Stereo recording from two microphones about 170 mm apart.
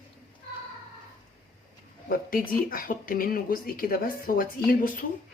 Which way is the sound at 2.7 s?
55° left (ahead or behind).